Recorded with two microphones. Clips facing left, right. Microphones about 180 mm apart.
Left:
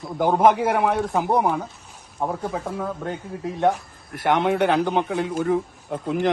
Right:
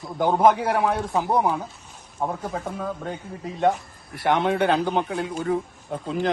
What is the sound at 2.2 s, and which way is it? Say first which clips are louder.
A man's voice: left 2 dB; 5° left (ahead or behind).